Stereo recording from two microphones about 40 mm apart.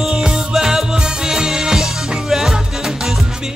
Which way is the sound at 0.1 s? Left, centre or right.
Centre.